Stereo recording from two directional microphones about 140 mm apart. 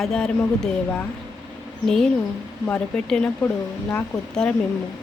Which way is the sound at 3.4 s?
20° left (ahead or behind).